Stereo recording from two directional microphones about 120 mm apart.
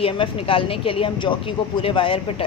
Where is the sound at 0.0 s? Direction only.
50° left (ahead or behind).